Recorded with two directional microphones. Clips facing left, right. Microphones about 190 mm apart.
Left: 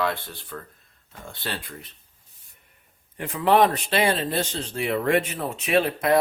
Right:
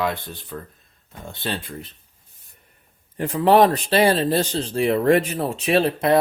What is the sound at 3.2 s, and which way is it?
Speech, 35° right (ahead or behind).